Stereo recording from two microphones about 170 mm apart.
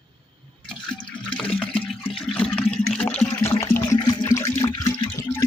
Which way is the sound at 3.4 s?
15° left (ahead or behind).